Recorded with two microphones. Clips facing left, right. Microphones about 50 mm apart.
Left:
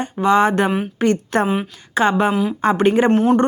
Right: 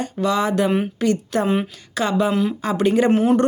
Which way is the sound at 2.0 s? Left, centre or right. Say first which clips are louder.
Left 6 dB; left.